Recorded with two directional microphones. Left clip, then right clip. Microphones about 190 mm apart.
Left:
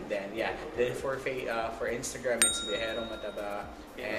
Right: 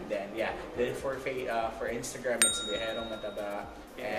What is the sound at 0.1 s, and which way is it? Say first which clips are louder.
Speech: even; 15° left (ahead or behind).